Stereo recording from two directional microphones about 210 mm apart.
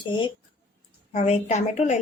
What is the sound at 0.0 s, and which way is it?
Speech, 25° left (ahead or behind).